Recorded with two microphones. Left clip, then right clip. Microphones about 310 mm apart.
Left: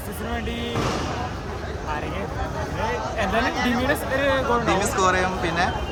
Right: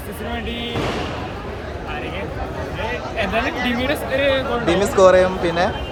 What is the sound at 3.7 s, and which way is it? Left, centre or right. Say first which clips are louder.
Speech: right 3 dB; left.